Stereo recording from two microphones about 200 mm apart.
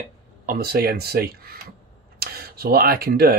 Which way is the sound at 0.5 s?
50° right (ahead or behind).